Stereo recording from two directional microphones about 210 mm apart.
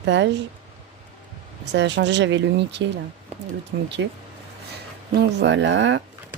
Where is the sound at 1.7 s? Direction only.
55° right (ahead or behind).